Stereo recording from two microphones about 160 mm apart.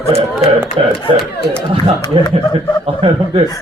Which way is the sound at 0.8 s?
35° right (ahead or behind).